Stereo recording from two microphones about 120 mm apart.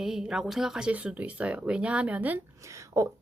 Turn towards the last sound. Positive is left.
turn(degrees=-25)  # may be behind; listen again after turning